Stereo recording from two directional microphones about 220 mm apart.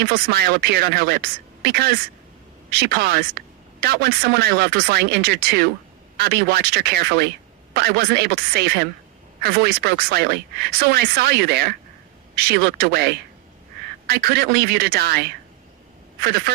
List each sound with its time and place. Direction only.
0.0 s a woman's voice: 45° right (ahead or behind)
14.1 s speech: 45° right (ahead or behind)